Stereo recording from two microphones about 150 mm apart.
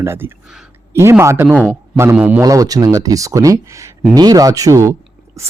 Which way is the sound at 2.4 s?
20° right (ahead or behind).